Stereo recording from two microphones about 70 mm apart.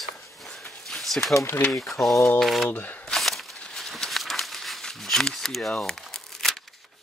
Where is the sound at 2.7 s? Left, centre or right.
Left.